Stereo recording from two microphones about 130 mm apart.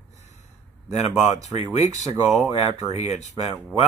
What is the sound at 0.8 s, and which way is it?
Speech, 60° left (ahead or behind).